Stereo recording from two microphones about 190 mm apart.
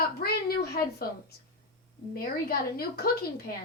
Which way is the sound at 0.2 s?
55° left (ahead or behind).